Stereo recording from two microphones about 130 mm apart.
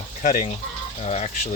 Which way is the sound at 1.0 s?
60° left (ahead or behind).